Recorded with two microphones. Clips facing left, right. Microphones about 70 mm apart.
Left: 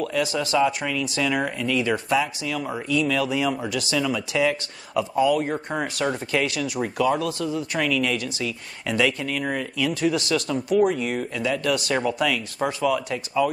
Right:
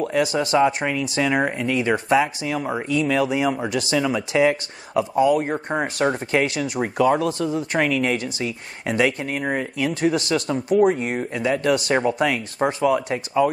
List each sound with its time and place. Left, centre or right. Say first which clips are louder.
0.0 s speech: right 3 dB; right